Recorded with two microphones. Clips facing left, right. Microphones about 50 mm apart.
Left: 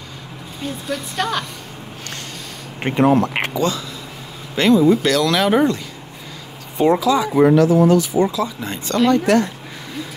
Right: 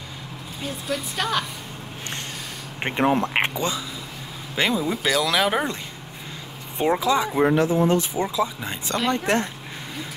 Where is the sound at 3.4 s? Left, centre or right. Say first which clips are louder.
Left 5 dB; right; by 5.7 s centre.